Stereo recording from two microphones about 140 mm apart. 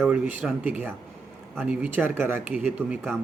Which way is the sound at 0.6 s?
15° right (ahead or behind).